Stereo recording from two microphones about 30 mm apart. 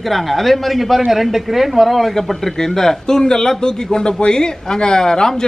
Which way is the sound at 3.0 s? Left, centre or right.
Left.